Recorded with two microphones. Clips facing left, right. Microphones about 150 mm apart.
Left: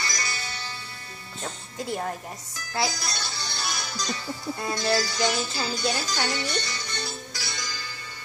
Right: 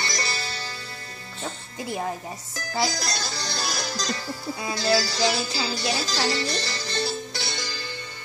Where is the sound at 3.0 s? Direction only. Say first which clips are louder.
Right 4 dB; 40° right (ahead or behind).